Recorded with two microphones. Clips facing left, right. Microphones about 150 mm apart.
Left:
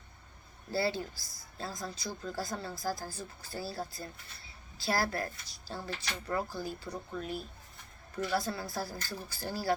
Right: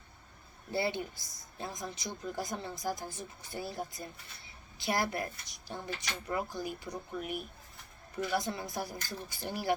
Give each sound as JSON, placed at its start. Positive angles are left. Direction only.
{"t": 0.7, "sound": "speech", "side_deg": -20}